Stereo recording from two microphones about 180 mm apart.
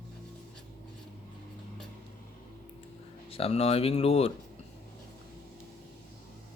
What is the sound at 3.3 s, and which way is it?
Speech, 35° left (ahead or behind).